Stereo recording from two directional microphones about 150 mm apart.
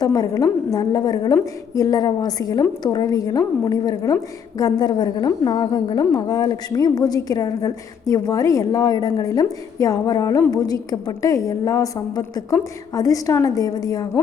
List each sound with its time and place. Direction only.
0.0 s a woman's voice: 25° left (ahead or behind)